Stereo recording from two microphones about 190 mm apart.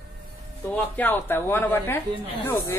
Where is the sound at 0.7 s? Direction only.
10° left (ahead or behind).